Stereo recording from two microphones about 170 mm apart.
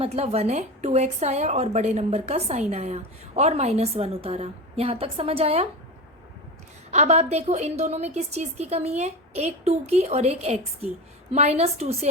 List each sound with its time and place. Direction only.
0.0 s a woman's voice: 35° right (ahead or behind)
6.9 s a woman's voice: 40° right (ahead or behind)